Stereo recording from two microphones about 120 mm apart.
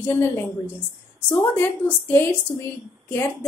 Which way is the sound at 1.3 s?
15° left (ahead or behind).